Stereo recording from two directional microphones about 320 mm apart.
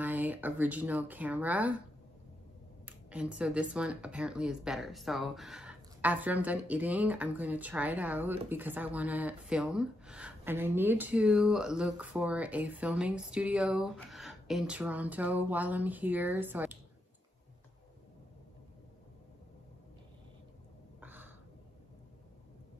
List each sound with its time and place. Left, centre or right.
0.0 s speech: centre
2.8 s speech: centre
21.0 s a sound: centre